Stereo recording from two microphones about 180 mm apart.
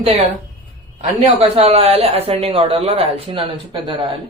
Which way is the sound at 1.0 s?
35° right (ahead or behind).